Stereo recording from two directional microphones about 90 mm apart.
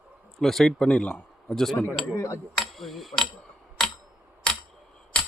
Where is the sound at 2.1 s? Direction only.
35° left (ahead or behind).